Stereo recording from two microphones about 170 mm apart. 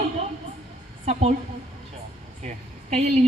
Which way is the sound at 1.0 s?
40° right (ahead or behind).